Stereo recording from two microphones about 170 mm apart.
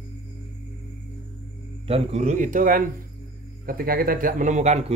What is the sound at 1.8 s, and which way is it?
A man's voice, 40° right (ahead or behind).